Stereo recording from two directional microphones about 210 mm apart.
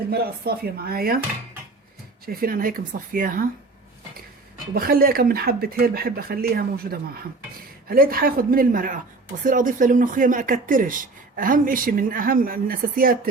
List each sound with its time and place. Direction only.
0.1 s speech: 45° right (ahead or behind)
2.2 s speech: 45° right (ahead or behind)
4.7 s speech: 45° right (ahead or behind)